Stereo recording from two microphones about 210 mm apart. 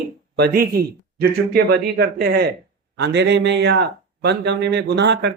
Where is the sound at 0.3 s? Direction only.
50° right (ahead or behind).